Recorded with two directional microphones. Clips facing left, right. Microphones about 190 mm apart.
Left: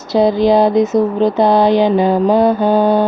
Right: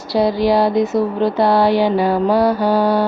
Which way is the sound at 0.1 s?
20° left (ahead or behind).